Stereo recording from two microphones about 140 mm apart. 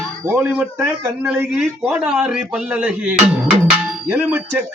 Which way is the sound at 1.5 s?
5° right (ahead or behind).